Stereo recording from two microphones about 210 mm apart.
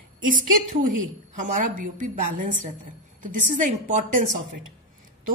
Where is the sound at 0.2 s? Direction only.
40° right (ahead or behind).